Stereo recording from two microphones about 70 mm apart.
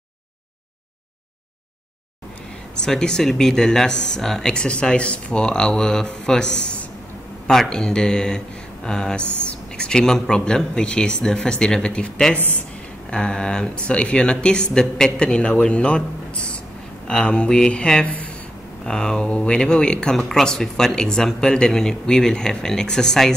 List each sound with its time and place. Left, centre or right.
2.8 s a man's voice: centre
18.9 s speech: centre